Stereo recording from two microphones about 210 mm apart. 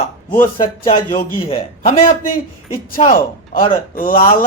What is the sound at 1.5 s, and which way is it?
Speech, 35° left (ahead or behind).